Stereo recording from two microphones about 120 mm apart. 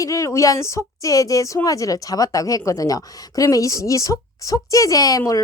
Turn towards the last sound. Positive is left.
turn(degrees=30)  # may be behind; listen again after turning